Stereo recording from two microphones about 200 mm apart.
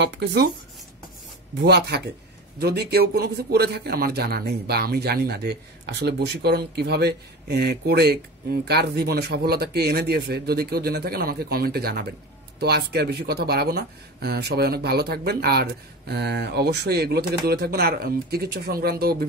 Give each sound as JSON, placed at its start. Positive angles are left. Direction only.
{"t": 0.2, "sound": "speech", "side_deg": -55}
{"t": 1.6, "sound": "a man's voice", "side_deg": -55}